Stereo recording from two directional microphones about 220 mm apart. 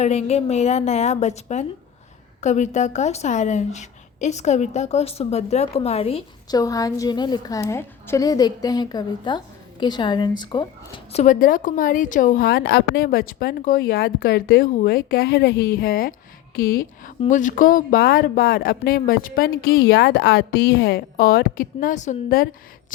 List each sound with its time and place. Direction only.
0.0 s a woman's voice: 30° left (ahead or behind)